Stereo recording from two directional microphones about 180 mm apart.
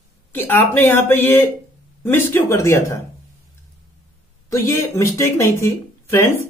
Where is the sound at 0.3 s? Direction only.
10° left (ahead or behind).